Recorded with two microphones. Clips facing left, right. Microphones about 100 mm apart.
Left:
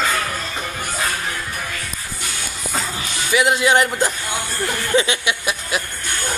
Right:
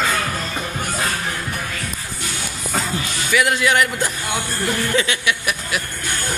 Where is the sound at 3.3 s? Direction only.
20° left (ahead or behind).